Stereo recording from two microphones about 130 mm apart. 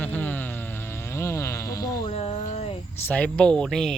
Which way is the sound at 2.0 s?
55° left (ahead or behind).